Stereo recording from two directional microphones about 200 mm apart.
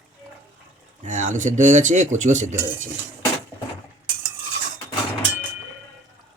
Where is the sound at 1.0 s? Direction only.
40° right (ahead or behind).